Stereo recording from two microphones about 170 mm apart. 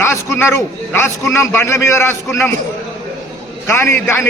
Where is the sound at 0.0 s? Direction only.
15° left (ahead or behind).